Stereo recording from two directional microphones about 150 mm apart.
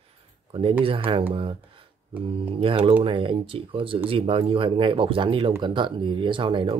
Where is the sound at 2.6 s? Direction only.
35° right (ahead or behind).